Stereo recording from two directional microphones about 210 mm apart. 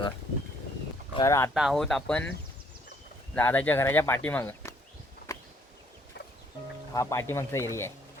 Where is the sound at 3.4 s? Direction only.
10° left (ahead or behind).